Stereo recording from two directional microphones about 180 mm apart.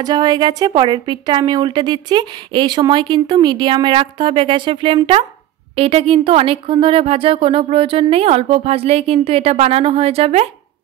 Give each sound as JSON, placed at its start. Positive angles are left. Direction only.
{"t": 0.0, "sound": "a woman's voice", "side_deg": -25}